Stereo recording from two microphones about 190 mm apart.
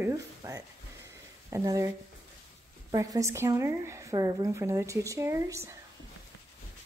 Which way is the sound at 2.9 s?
20° right (ahead or behind).